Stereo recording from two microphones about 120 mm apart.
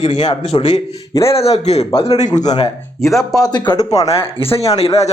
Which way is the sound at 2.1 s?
80° left.